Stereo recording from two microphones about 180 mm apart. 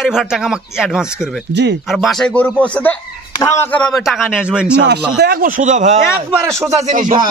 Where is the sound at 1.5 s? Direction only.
75° right (ahead or behind).